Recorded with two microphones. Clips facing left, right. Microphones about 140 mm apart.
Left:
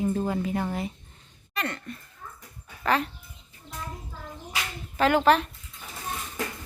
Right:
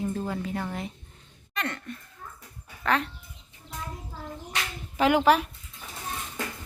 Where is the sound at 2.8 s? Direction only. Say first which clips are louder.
Left 1 dB; centre (ahead or behind).